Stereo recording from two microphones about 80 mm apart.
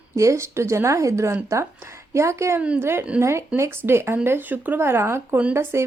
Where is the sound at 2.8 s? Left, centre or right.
Right.